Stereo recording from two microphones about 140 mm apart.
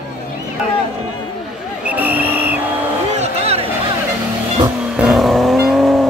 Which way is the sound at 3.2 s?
50° right (ahead or behind).